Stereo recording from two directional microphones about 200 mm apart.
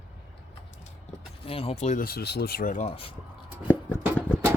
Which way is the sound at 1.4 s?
30° left (ahead or behind).